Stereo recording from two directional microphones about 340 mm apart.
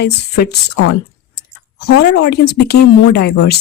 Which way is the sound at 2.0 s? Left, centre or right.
Left.